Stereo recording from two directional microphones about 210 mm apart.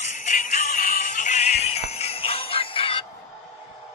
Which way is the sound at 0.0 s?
35° left (ahead or behind).